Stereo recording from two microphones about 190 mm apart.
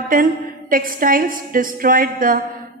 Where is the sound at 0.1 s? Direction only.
45° right (ahead or behind).